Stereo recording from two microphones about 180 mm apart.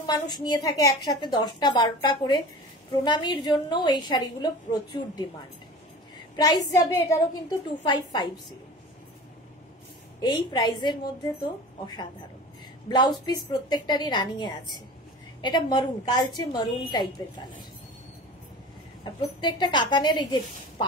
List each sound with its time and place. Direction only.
0.0 s a woman's voice: 25° left (ahead or behind)
6.3 s a woman's voice: 20° left (ahead or behind)
10.2 s a woman's voice: 25° left (ahead or behind)
12.8 s a woman's voice: 25° left (ahead or behind)
19.4 s a woman's voice: 25° left (ahead or behind)